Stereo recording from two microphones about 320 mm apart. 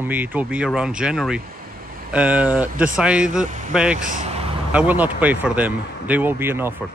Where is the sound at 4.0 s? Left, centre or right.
Right.